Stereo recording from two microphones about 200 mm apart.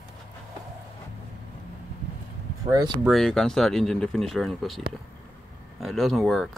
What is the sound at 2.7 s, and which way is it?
Speech, 20° right (ahead or behind).